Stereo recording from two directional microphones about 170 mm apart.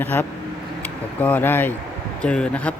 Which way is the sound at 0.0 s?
10° left (ahead or behind).